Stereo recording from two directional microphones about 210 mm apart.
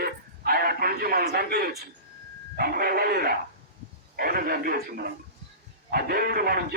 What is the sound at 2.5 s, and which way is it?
A man's voice, 45° right (ahead or behind).